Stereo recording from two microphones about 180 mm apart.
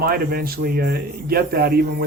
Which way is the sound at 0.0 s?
60° right (ahead or behind).